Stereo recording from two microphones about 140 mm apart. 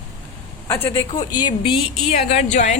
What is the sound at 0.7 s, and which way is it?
Speech, 15° left (ahead or behind).